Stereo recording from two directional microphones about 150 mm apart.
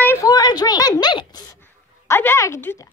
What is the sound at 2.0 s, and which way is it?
Speech, 15° left (ahead or behind).